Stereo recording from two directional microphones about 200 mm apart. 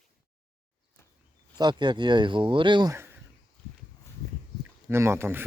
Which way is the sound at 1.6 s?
20° right (ahead or behind).